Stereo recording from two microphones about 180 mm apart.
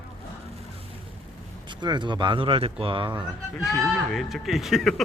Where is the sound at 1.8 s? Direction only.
25° right (ahead or behind).